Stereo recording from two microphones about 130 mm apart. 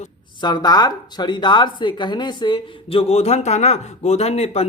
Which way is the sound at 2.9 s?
55° left (ahead or behind).